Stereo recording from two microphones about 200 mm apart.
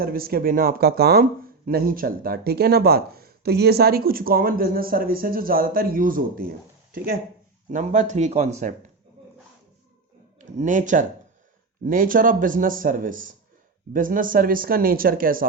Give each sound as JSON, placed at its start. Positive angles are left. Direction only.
{"t": 0.0, "sound": "speech", "side_deg": -45}
{"t": 10.3, "sound": "speech", "side_deg": -35}